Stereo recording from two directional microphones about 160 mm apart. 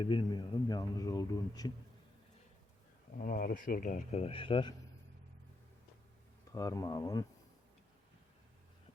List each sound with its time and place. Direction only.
0.0 s speech: 30° left (ahead or behind)
3.2 s speech: 55° left (ahead or behind); by 4.7 s 35° left (ahead or behind)
6.5 s speech: 20° left (ahead or behind)